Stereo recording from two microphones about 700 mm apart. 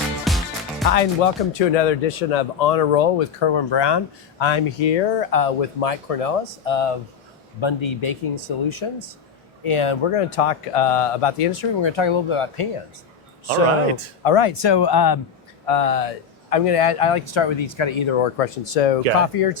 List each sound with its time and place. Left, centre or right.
0.3 s music: centre
0.9 s speech: left
14.3 s speech: left
15.6 s speech: left